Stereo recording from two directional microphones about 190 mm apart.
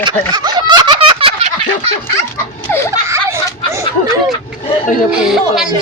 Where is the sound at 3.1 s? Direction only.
15° right (ahead or behind).